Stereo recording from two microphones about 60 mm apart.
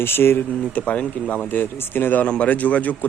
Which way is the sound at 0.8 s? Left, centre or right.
Centre.